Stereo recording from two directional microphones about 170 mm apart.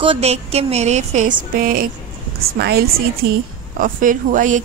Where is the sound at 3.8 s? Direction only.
50° right (ahead or behind).